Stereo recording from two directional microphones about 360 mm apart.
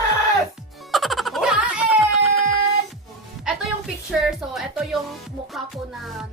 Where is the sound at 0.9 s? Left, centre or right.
Centre.